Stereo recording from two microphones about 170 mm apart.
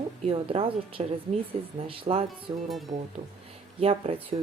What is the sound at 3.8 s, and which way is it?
Speech, 35° right (ahead or behind).